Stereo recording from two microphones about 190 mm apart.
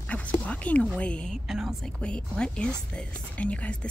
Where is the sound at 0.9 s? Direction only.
5° left (ahead or behind).